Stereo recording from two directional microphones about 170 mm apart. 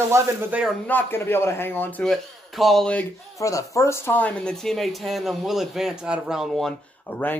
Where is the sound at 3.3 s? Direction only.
20° left (ahead or behind).